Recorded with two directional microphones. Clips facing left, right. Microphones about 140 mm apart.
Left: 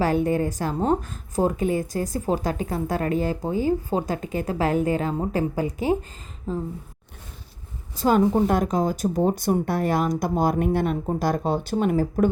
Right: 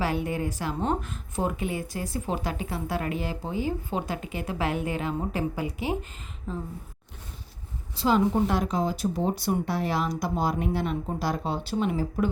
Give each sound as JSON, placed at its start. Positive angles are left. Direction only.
{"t": 0.0, "sound": "a woman's voice", "side_deg": 45}
{"t": 7.9, "sound": "speech", "side_deg": 45}